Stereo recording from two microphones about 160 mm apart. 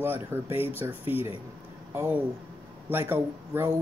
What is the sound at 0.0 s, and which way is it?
Speech, 15° right (ahead or behind).